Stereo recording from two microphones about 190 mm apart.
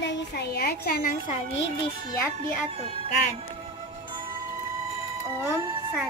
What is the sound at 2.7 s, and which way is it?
Music, 30° right (ahead or behind).